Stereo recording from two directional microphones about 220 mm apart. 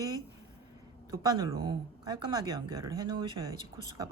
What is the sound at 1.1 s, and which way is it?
Speech, 15° right (ahead or behind).